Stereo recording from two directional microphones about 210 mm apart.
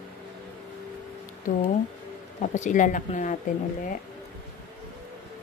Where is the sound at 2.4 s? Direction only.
35° left (ahead or behind).